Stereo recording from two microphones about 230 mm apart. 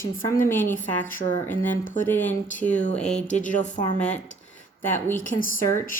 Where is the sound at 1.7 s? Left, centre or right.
Left.